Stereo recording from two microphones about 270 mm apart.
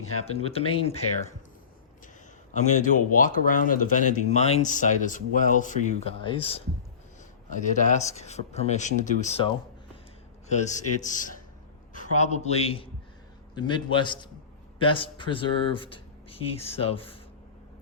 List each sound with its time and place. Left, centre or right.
0.3 s speech: left
2.5 s a man's voice: left